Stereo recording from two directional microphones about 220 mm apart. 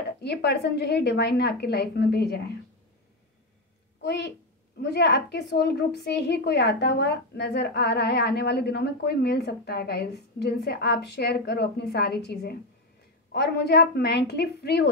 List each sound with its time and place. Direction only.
0.2 s a woman's voice: 50° left (ahead or behind)
4.0 s a woman's voice: 50° left (ahead or behind)